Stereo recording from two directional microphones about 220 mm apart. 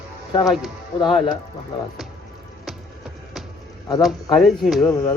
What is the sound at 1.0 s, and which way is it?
Speech, 20° left (ahead or behind).